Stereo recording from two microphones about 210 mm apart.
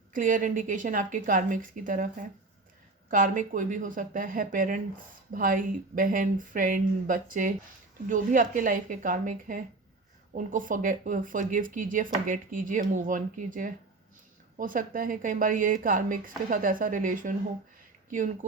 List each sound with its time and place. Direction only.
0.1 s speech: 40° right (ahead or behind)